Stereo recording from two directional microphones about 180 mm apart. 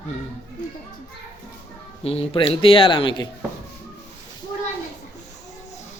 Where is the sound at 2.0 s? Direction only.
35° left (ahead or behind).